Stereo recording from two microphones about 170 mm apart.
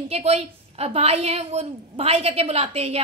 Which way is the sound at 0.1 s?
40° right (ahead or behind).